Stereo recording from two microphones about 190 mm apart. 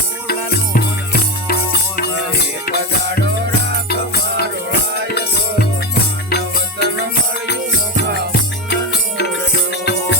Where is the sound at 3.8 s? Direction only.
55° left (ahead or behind).